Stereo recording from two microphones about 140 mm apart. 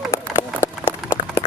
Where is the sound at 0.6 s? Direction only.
20° left (ahead or behind).